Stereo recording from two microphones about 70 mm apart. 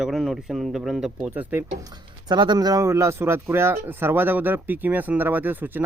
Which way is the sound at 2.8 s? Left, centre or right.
Right.